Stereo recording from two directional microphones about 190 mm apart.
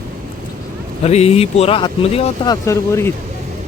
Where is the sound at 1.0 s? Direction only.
35° left (ahead or behind); by 3.1 s 15° left (ahead or behind).